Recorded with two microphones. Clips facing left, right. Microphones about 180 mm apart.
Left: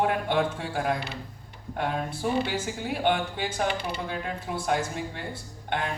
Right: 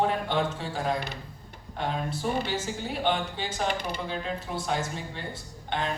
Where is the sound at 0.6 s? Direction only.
55° left (ahead or behind).